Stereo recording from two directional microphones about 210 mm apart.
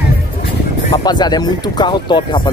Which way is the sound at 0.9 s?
20° left (ahead or behind).